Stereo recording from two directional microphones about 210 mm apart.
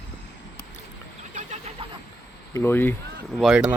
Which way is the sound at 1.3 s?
35° right (ahead or behind).